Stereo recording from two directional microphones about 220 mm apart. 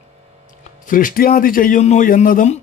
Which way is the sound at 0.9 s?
40° left (ahead or behind).